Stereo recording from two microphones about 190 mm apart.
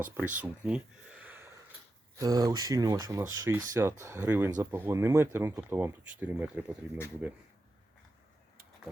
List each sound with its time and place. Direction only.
0.0 s speech: 10° right (ahead or behind)
0.6 s a sound: 5° right (ahead or behind)
2.1 s speech: 20° right (ahead or behind)